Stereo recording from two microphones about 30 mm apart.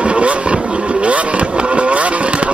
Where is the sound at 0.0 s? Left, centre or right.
Right.